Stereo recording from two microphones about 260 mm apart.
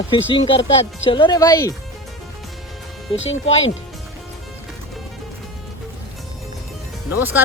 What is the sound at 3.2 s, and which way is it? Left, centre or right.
Speech, left.